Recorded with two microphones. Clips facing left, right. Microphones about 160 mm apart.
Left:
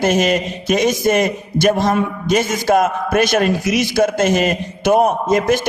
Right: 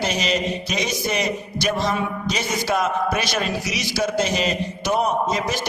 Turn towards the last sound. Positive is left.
turn(degrees=55)  # may be behind; listen again after turning